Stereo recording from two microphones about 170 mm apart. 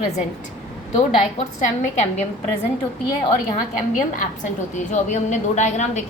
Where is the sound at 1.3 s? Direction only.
45° left (ahead or behind).